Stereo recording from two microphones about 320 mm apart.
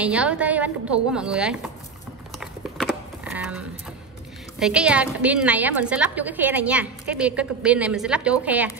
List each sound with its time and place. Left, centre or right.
0.0 s a woman's voice: centre
2.3 s a sound: centre
4.6 s a woman's voice: centre